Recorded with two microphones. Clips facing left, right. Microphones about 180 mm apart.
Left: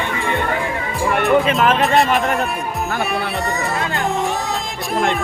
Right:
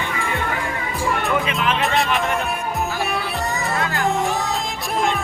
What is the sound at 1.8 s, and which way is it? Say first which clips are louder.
Speech: left 5 dB; centre (ahead or behind).